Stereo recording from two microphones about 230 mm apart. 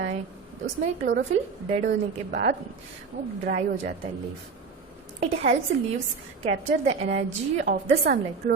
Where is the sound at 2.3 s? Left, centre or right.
Right.